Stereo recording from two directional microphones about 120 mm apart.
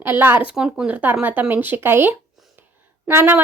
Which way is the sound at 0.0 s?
15° right (ahead or behind).